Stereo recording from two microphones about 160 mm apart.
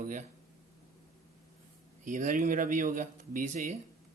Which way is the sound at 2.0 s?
55° right (ahead or behind).